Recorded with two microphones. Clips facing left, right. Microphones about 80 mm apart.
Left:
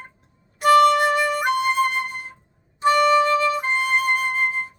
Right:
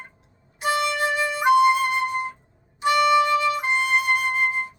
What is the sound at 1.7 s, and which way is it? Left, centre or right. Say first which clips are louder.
Flute: left 1 dB; left.